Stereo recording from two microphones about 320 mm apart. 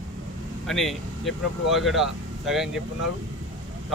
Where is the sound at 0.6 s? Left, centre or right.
Centre.